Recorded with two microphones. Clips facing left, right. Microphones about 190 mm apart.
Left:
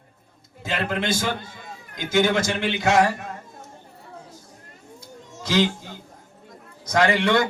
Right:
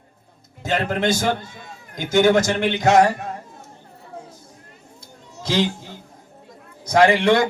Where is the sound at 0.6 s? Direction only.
40° right (ahead or behind).